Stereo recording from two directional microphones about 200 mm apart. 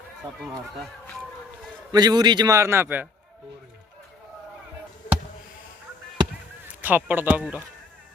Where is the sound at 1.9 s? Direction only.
20° right (ahead or behind).